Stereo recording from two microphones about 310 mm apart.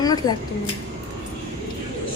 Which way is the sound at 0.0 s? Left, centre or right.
Centre.